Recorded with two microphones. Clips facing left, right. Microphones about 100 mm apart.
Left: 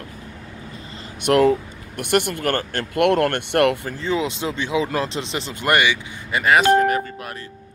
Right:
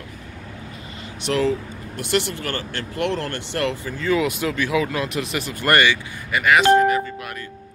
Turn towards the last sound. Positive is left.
turn(degrees=35)  # may be behind; listen again after turning